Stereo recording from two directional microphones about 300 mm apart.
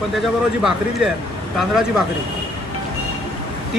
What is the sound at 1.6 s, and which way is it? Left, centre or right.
Speech, centre.